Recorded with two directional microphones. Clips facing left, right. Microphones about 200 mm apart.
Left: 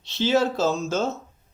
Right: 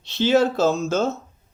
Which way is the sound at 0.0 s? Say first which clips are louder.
Right 3 dB; 55° right (ahead or behind).